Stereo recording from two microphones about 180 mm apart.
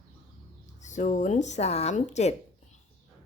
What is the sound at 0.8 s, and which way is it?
A woman's voice, 40° left (ahead or behind).